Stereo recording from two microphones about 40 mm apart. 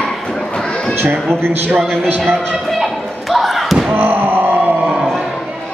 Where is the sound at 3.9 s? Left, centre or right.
Right.